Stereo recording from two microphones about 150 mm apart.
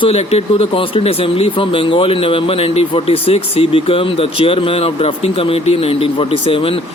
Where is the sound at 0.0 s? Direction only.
45° left (ahead or behind).